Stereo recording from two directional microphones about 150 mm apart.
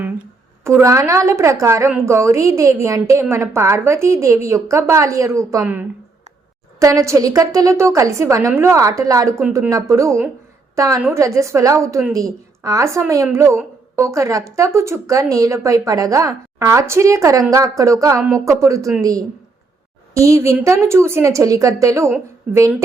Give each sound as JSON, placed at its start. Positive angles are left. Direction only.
{"t": 0.6, "sound": "speech", "side_deg": -20}
{"t": 6.7, "sound": "a woman's voice", "side_deg": -20}